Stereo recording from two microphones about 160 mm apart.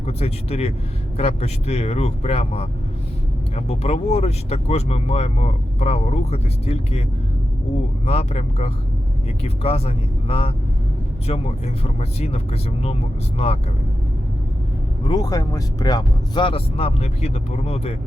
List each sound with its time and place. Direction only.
0.0 s speech: 40° left (ahead or behind)
8.0 s speech: 40° left (ahead or behind)
15.0 s speech: 25° left (ahead or behind)